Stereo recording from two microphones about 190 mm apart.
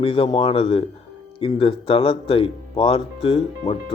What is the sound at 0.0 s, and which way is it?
Speech, 30° left (ahead or behind).